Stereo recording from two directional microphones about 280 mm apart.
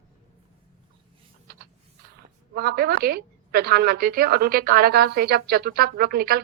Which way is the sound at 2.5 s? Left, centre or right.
Right.